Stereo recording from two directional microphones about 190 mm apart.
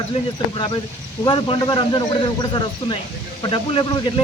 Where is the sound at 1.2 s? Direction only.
25° left (ahead or behind).